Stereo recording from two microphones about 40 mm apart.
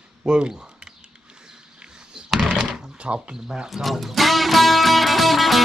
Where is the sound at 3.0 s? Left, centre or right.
Right.